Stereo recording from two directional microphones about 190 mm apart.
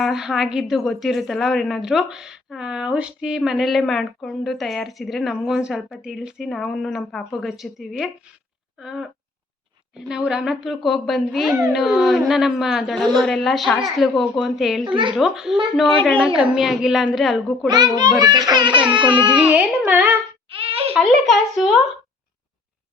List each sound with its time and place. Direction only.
0.0 s a woman's voice: centre (ahead or behind)
17.7 s speech: 20° right (ahead or behind)
19.4 s speech: 10° right (ahead or behind)
20.5 s a sound: 30° right (ahead or behind)
21.2 s a woman's voice: centre (ahead or behind)